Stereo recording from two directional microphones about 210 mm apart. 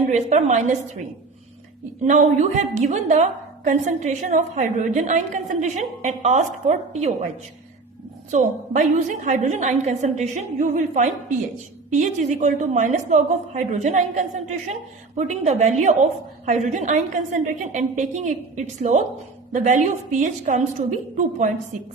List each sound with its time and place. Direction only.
0.1 s a woman's voice: 35° right (ahead or behind)
2.0 s a woman's voice: 35° right (ahead or behind)
8.3 s a woman's voice: 35° right (ahead or behind)